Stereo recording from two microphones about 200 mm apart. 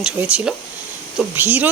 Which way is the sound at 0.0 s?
5° right (ahead or behind).